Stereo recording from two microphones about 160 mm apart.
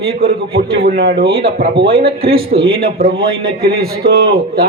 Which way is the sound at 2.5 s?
35° right (ahead or behind).